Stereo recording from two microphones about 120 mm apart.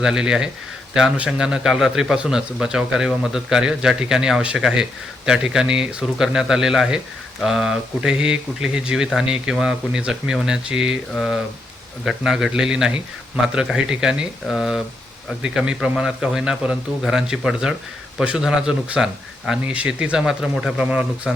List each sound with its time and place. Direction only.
0.0 s a man's voice: 5° right (ahead or behind)